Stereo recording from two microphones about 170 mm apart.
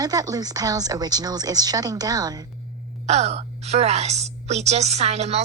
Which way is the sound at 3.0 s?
40° right (ahead or behind).